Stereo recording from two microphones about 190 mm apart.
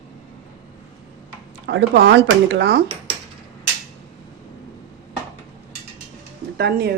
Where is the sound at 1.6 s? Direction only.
70° right (ahead or behind).